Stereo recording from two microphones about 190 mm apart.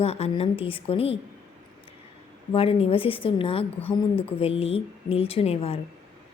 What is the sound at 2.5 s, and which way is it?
A woman's voice, 30° left (ahead or behind).